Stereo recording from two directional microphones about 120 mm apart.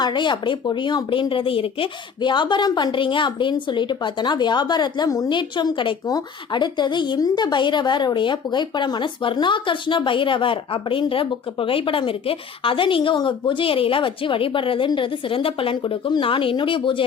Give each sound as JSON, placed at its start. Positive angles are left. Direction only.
{"t": 0.0, "sound": "a woman's voice", "side_deg": 40}